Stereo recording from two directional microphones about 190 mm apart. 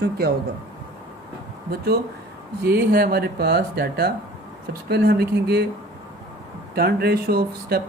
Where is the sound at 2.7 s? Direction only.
50° right (ahead or behind).